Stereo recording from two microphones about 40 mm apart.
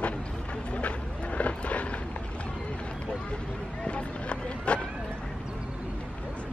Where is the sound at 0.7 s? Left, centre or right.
Left.